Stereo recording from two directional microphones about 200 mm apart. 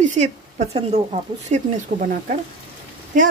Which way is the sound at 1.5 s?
40° right (ahead or behind).